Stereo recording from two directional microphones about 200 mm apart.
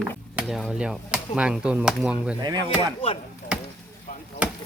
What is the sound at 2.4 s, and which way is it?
Speech, 20° right (ahead or behind).